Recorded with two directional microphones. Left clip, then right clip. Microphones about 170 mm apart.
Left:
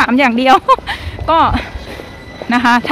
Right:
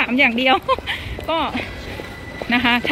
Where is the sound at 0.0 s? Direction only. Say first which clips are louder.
Left 5 dB; 25° left (ahead or behind).